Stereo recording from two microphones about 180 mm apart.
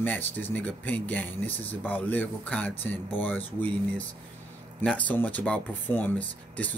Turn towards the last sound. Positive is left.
turn(degrees=10)  # may be behind; listen again after turning